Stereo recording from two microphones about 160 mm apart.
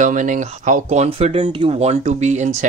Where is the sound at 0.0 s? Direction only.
50° right (ahead or behind).